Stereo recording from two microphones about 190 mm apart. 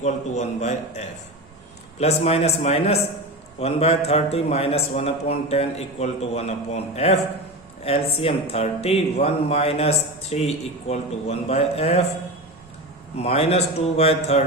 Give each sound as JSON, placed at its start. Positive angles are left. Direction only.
{"t": 0.0, "sound": "a man's voice", "side_deg": 40}
{"t": 13.1, "sound": "a man's voice", "side_deg": 35}